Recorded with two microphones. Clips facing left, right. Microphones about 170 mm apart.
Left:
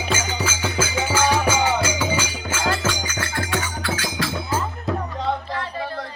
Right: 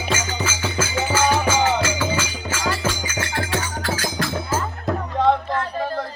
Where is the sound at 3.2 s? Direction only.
30° right (ahead or behind).